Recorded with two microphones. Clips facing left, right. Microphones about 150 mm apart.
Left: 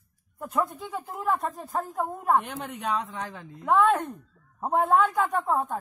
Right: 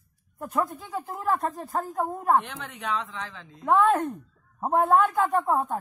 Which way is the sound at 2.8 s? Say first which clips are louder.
Left 1 dB; 40° left (ahead or behind).